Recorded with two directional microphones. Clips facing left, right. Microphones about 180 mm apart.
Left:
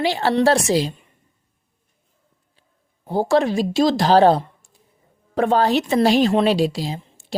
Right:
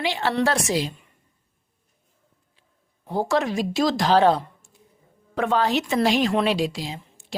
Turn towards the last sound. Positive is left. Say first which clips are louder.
# left 6 dB
turn(degrees=35)  # may be behind; listen again after turning